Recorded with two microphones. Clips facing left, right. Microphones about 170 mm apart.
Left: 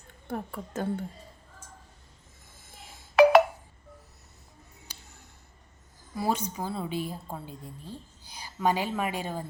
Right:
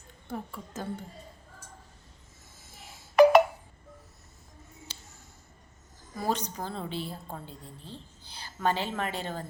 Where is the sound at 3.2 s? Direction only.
Centre (ahead or behind).